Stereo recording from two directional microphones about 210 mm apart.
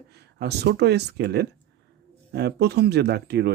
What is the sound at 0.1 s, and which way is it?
Speech, 50° right (ahead or behind).